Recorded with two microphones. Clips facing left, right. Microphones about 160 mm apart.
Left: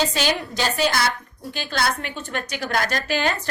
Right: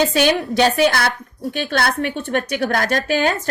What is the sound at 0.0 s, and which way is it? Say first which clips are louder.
A woman's voice: right 6 dB; 60° right (ahead or behind).